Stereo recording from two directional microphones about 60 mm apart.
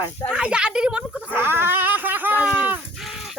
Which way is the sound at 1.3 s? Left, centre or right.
Right.